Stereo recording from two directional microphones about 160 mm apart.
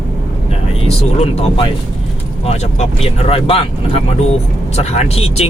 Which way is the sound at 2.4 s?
40° left (ahead or behind).